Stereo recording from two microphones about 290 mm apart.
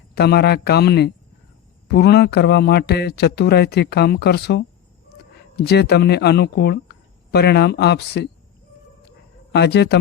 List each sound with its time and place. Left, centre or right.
0.1 s speech: left
9.5 s speech: left